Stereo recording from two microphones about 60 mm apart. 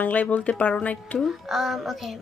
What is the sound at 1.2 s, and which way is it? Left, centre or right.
Speech, centre.